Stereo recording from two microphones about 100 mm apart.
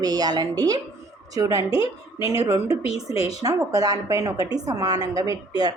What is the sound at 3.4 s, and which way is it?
A woman's voice, 35° right (ahead or behind).